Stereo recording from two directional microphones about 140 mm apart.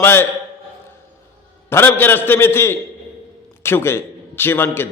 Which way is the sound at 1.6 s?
15° left (ahead or behind).